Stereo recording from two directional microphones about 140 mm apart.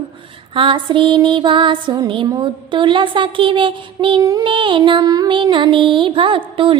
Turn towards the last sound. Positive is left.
turn(degrees=-35)  # may be behind; listen again after turning